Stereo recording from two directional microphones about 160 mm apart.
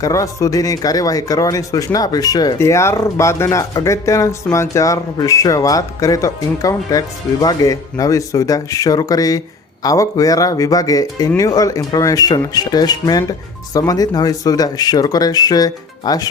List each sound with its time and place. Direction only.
0.0 s speech: 20° left (ahead or behind)